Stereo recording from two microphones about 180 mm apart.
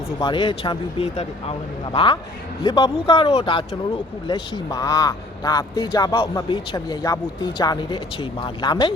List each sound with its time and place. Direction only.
0.2 s speech: 25° left (ahead or behind)